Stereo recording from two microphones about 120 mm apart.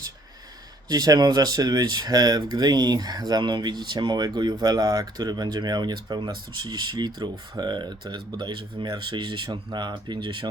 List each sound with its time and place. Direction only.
0.9 s speech: 30° right (ahead or behind)